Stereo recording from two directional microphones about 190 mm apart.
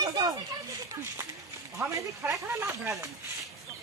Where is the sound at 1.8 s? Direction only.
15° right (ahead or behind).